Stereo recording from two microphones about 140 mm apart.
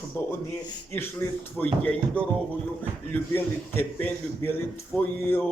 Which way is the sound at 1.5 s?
10° left (ahead or behind).